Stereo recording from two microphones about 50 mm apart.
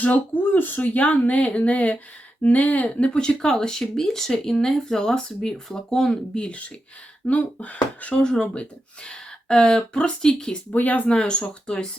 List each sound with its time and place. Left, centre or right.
0.0 s speech: left
8.2 s speech: centre
10.7 s speech: left
11.2 s speech: centre